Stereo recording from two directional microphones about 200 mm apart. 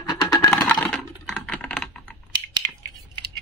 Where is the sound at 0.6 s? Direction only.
5° left (ahead or behind).